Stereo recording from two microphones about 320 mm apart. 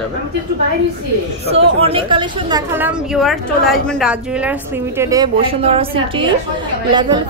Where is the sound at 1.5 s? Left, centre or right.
Centre.